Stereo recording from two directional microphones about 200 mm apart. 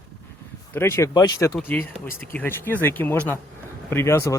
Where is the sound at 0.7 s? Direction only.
10° left (ahead or behind).